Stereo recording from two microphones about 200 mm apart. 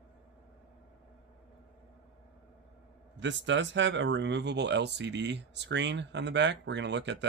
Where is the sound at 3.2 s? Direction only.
65° right (ahead or behind).